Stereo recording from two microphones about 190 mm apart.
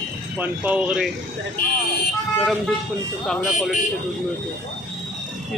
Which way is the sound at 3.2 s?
Centre (ahead or behind).